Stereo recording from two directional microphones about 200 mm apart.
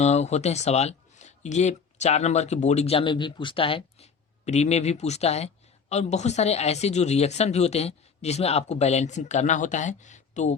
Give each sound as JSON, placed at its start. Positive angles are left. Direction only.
{"t": 0.0, "sound": "speech", "side_deg": 35}